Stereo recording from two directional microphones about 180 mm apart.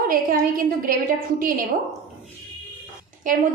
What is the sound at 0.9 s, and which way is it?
Speech, 50° right (ahead or behind).